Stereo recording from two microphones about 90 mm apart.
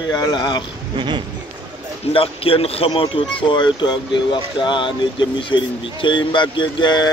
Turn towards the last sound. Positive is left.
turn(degrees=55)  # may be behind; listen again after turning